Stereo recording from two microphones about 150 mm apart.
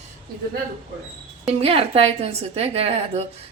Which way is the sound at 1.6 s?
40° right (ahead or behind).